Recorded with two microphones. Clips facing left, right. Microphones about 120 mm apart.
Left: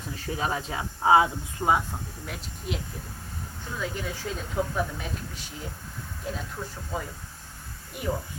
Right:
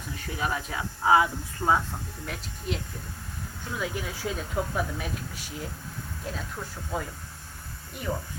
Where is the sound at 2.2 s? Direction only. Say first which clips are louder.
Right 3 dB; centre (ahead or behind).